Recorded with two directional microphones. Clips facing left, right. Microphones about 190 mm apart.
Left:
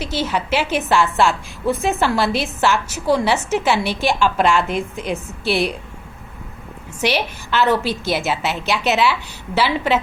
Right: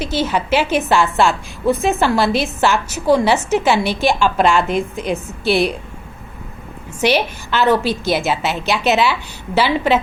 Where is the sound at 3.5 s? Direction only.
40° right (ahead or behind).